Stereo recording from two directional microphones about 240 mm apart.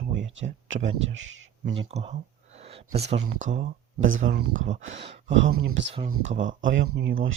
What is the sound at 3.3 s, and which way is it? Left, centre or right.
Speech, right.